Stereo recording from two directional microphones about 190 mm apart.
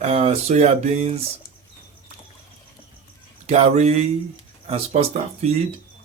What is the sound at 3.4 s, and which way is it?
Speech, 35° right (ahead or behind).